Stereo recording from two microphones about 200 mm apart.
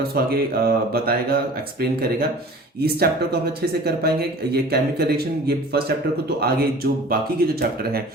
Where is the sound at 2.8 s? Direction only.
50° right (ahead or behind).